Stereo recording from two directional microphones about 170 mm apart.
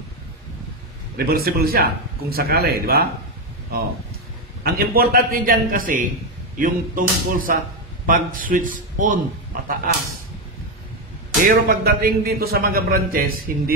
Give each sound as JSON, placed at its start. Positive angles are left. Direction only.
{"t": 1.1, "sound": "a man's voice", "side_deg": -65}
{"t": 4.6, "sound": "a man's voice", "side_deg": -60}
{"t": 11.5, "sound": "a man's voice", "side_deg": -60}